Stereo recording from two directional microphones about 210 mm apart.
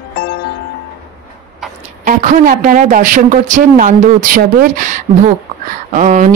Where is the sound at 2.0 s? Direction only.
40° right (ahead or behind).